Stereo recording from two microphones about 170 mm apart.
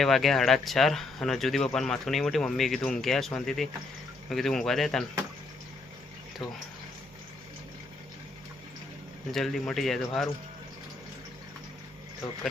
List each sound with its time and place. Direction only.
0.0 s speech: centre (ahead or behind)
9.3 s speech: centre (ahead or behind)